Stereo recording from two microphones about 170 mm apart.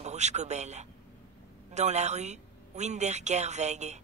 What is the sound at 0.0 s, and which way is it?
Speech, 40° right (ahead or behind).